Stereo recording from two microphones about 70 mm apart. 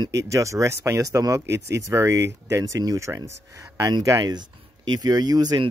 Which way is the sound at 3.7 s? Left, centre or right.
Right.